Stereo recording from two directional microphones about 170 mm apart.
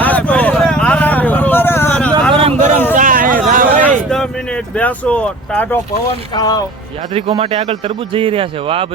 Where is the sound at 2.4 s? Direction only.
40° right (ahead or behind).